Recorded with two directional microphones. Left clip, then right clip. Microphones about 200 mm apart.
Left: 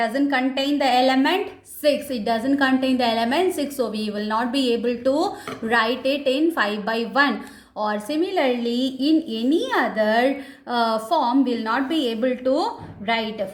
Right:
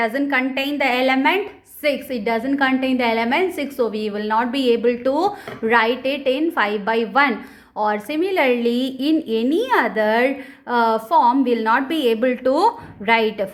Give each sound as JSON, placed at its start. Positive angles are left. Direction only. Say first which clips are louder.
{"t": 0.0, "sound": "a woman's voice", "louder": "right 2 dB", "side_deg": -35}